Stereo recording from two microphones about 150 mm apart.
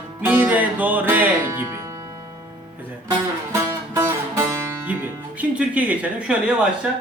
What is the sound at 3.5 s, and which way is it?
Music, 20° right (ahead or behind).